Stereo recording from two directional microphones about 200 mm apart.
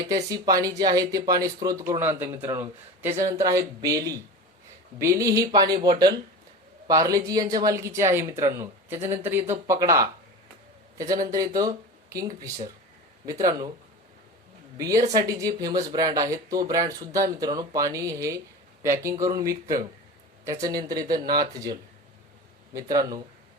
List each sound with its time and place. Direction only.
0.0 s speech: 20° right (ahead or behind)
14.8 s speech: 15° right (ahead or behind)